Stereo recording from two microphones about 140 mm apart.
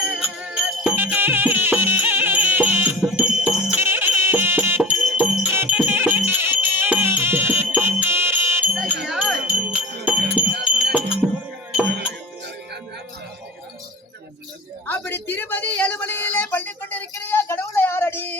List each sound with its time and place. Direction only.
0.1 s jingle bell: 10° right (ahead or behind)
0.9 s music: 15° right (ahead or behind)
14.8 s a sound: 15° left (ahead or behind)